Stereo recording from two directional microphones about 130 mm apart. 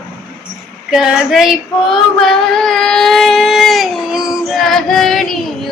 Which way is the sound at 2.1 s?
5° left (ahead or behind).